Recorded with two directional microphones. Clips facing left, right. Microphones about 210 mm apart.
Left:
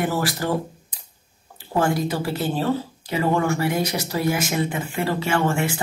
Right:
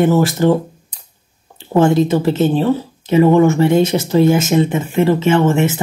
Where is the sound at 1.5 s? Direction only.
25° right (ahead or behind).